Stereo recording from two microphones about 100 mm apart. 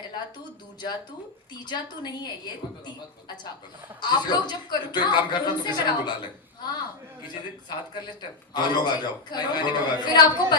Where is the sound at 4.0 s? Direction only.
45° left (ahead or behind).